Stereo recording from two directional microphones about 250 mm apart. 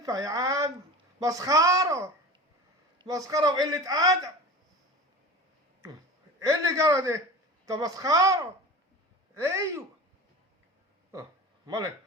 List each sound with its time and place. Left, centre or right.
0.0 s a man's voice: centre
6.4 s a man's voice: centre
11.1 s a sound: centre